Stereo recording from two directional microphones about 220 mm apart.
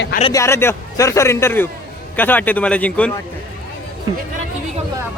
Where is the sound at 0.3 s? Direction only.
10° left (ahead or behind).